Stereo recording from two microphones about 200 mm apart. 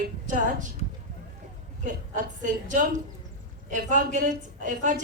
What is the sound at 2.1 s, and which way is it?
Speech, 40° right (ahead or behind).